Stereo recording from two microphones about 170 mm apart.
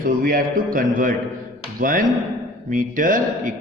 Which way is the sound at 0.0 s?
55° right (ahead or behind).